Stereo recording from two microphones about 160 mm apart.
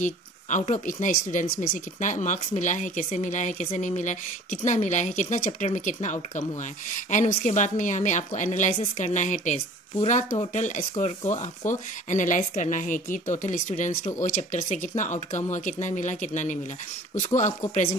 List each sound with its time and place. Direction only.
0.0 s speech: 50° left (ahead or behind)